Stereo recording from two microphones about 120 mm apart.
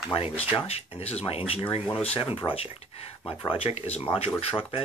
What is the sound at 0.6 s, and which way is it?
Speech, 55° left (ahead or behind).